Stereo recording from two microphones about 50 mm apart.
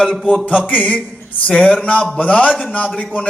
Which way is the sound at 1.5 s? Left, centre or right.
Centre.